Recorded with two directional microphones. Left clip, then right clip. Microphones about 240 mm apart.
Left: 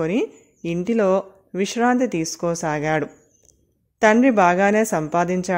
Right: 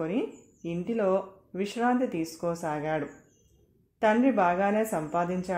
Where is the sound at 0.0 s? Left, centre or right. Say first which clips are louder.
Left 8 dB; left.